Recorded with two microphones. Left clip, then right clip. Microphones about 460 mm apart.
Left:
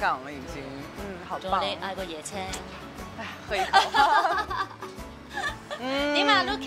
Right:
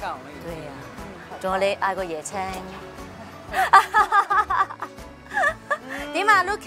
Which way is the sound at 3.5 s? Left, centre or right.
Right.